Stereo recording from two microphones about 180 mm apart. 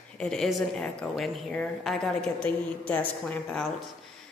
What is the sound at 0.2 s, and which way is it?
A woman's voice, centre (ahead or behind).